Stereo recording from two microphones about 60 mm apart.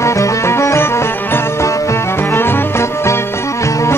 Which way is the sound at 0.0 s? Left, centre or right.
Left.